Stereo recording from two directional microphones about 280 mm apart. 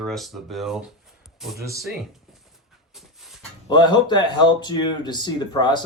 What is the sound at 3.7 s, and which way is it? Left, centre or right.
Speech, centre.